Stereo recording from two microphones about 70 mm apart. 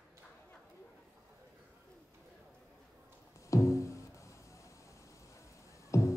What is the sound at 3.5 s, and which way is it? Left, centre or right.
Music, left.